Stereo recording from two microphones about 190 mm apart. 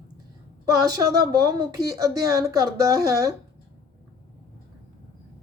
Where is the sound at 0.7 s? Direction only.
20° right (ahead or behind).